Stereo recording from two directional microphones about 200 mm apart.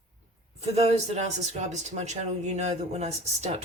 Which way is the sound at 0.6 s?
30° right (ahead or behind).